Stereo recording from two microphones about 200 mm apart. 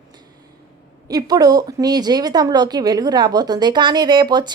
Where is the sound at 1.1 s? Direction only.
20° right (ahead or behind).